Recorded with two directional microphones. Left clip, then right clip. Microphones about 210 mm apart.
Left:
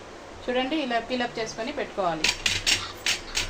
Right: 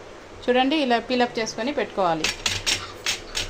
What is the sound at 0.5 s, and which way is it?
Speech, 50° right (ahead or behind).